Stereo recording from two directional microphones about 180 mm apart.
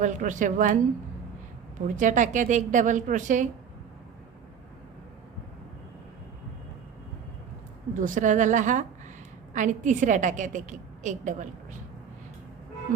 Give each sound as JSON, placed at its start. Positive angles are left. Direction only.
{"t": 0.0, "sound": "a woman's voice", "side_deg": -45}
{"t": 2.0, "sound": "a woman's voice", "side_deg": -45}
{"t": 7.9, "sound": "a woman's voice", "side_deg": -45}